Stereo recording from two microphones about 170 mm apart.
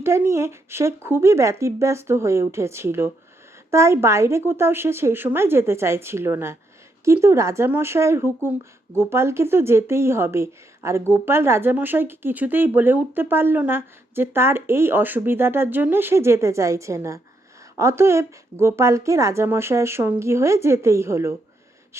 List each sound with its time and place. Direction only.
0.0 s speech: 15° right (ahead or behind)